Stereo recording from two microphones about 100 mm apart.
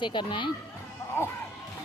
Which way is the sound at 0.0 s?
50° left (ahead or behind).